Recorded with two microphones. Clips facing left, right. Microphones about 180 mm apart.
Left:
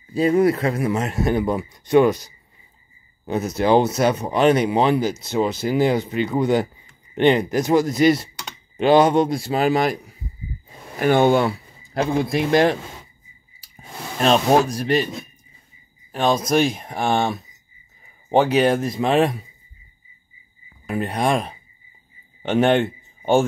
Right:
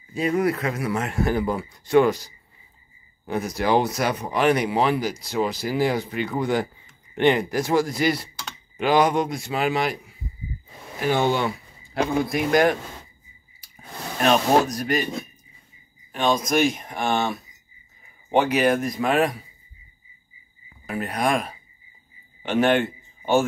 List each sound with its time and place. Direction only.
0.1 s a man's voice: 30° left (ahead or behind)
11.0 s speech: 55° left (ahead or behind)
11.4 s a man's voice: 35° left (ahead or behind)
12.4 s speech: 25° left (ahead or behind)
14.2 s speech: 30° left (ahead or behind)
16.1 s a man's voice: 35° left (ahead or behind)
20.8 s a man's voice: 25° left (ahead or behind)